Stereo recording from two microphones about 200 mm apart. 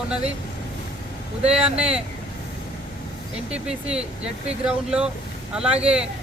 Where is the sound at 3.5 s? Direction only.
5° right (ahead or behind).